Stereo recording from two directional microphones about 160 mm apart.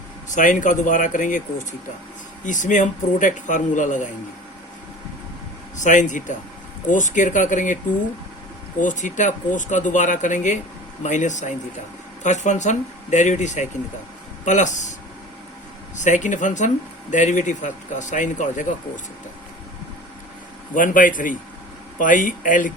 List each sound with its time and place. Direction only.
0.3 s speech: 55° left (ahead or behind)
2.4 s speech: 50° left (ahead or behind)
5.7 s speech: 50° left (ahead or behind)
8.8 s speech: 50° left (ahead or behind)
16.0 s speech: 50° left (ahead or behind)
20.7 s speech: 55° left (ahead or behind)